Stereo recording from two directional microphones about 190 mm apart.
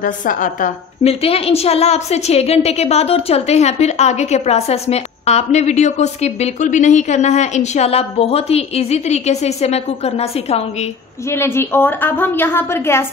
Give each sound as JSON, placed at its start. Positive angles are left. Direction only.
{"t": 0.0, "sound": "a woman's voice", "side_deg": 45}
{"t": 1.2, "sound": "a woman's voice", "side_deg": 30}
{"t": 11.2, "sound": "a woman's voice", "side_deg": 15}